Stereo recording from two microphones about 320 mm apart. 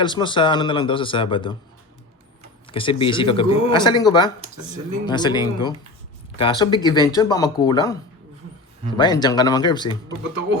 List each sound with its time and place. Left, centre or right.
0.0 s speech: centre
2.6 s speech: centre
9.0 s speech: centre